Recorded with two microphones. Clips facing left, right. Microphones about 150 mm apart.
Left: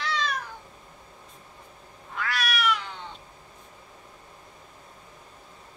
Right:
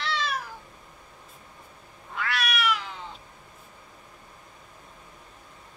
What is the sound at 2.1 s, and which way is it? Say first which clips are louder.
Cat: even; centre (ahead or behind).